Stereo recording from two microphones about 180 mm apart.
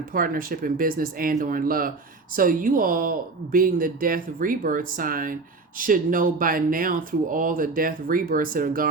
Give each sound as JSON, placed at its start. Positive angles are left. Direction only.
{"t": 0.1, "sound": "speech", "side_deg": -50}